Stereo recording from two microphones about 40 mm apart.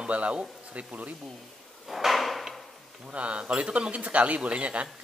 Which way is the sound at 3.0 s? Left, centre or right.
Right.